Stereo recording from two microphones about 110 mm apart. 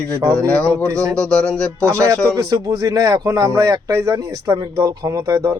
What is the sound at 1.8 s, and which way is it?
Speech, 25° right (ahead or behind).